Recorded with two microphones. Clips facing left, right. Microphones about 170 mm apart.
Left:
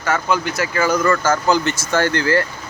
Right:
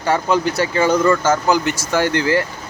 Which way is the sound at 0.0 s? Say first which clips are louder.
Right 3 dB; 30° right (ahead or behind).